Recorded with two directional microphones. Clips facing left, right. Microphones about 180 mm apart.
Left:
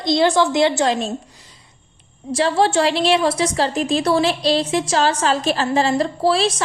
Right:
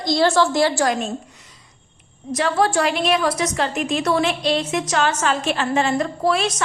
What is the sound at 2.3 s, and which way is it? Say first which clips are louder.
A woman's voice: left 2 dB; 30° left (ahead or behind).